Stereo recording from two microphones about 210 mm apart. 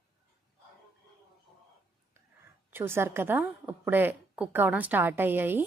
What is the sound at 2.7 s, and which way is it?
A woman's voice, 10° right (ahead or behind).